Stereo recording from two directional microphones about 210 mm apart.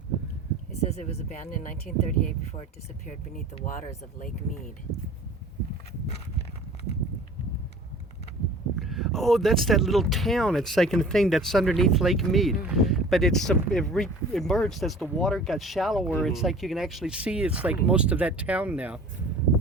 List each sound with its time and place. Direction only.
0.9 s speech: 30° left (ahead or behind)
8.8 s speech: centre (ahead or behind)